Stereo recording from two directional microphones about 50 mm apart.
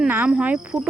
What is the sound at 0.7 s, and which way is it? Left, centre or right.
Speech, right.